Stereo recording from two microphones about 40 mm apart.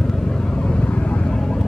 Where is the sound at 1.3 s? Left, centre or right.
Centre.